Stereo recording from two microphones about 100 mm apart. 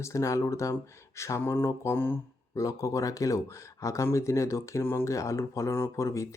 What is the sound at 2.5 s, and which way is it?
Speech, 35° left (ahead or behind).